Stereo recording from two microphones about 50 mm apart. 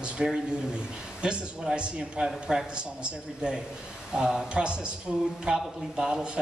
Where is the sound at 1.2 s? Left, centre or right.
Centre.